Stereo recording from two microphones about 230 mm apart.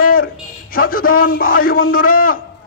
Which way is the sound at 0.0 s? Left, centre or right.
Left.